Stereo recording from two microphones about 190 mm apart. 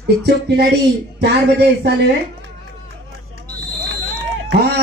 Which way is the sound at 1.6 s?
60° right (ahead or behind).